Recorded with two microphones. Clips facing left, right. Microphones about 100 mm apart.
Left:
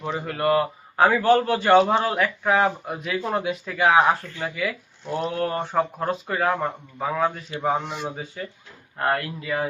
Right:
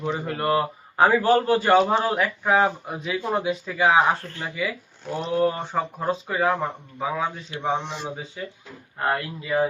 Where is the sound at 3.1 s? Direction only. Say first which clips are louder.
Right 1 dB; 5° right (ahead or behind).